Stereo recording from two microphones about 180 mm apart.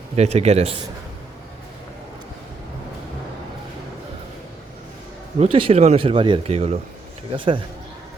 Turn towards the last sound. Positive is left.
turn(degrees=-30)  # may be behind; listen again after turning